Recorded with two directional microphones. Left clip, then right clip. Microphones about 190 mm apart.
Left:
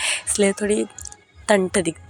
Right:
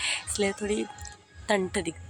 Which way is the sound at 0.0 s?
30° left (ahead or behind).